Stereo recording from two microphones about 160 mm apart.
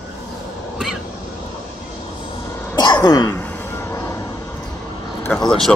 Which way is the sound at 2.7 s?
25° left (ahead or behind).